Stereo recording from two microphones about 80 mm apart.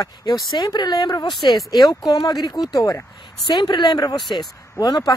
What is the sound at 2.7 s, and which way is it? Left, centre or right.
Speech, left.